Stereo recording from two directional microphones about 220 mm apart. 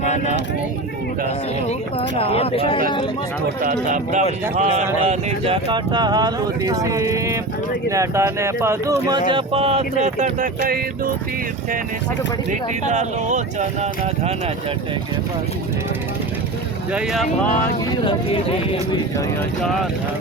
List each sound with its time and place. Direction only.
0.0 s a sound: 30° left (ahead or behind)
1.6 s speech: 25° left (ahead or behind)
3.6 s speech: 40° right (ahead or behind); by 9.2 s 15° right (ahead or behind)
9.3 s speech: 25° right (ahead or behind)
12.5 s speech: 30° right (ahead or behind)
16.9 s speech: centre (ahead or behind)
18.0 s speech: 25° left (ahead or behind)
19.6 s speech: centre (ahead or behind)